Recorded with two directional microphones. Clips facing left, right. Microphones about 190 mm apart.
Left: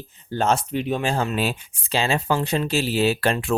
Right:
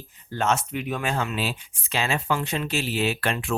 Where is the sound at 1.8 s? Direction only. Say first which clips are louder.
Left 4 dB; 30° left (ahead or behind).